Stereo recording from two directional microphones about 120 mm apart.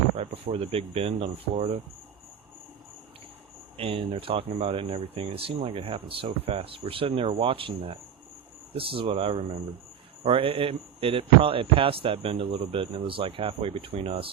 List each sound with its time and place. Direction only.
0.2 s speech: 55° right (ahead or behind)
3.8 s speech: 50° right (ahead or behind)